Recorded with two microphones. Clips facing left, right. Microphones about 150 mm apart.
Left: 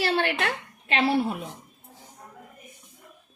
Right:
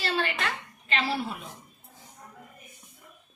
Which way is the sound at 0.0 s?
65° left (ahead or behind).